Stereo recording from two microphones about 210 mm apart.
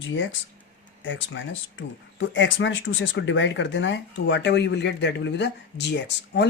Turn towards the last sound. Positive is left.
turn(degrees=55)  # may be behind; listen again after turning